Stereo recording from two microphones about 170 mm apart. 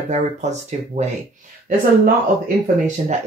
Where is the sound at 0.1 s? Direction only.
45° right (ahead or behind).